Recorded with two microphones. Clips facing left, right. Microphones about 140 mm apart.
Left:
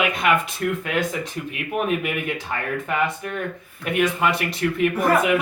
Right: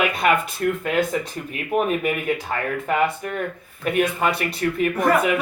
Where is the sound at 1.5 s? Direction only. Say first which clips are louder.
Right 2 dB; 40° right (ahead or behind).